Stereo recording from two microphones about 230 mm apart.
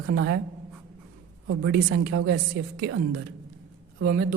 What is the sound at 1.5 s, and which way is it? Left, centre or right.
A woman's voice, right.